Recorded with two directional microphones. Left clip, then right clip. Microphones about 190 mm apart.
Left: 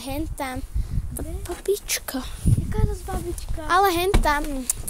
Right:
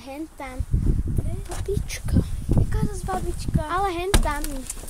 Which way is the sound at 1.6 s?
60° left (ahead or behind).